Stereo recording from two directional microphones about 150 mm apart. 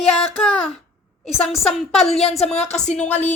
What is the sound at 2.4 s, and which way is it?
Speech, 45° left (ahead or behind).